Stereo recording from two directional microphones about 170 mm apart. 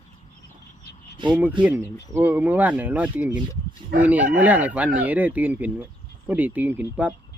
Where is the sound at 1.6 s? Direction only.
15° right (ahead or behind).